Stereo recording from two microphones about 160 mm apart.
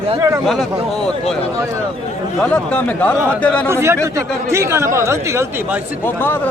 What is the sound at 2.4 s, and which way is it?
Speech, 10° left (ahead or behind).